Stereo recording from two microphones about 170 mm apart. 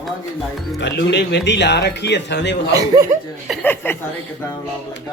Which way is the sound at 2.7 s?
20° right (ahead or behind).